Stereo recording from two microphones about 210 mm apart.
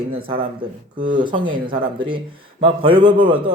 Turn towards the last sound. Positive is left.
turn(degrees=-20)  # may be behind; listen again after turning